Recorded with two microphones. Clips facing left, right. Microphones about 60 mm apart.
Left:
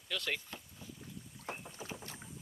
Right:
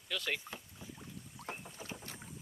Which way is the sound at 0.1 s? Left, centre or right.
Centre.